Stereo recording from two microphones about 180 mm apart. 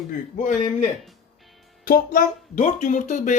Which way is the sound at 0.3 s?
45° left (ahead or behind).